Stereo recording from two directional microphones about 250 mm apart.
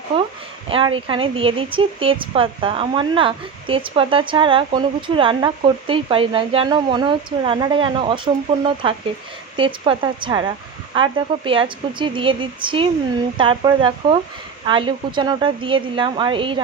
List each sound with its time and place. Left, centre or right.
0.1 s speech: right